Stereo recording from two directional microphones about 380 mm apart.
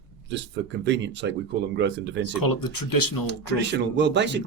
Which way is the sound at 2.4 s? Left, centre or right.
Left.